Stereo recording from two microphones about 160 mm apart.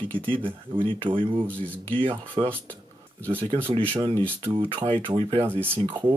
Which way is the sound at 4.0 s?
30° right (ahead or behind).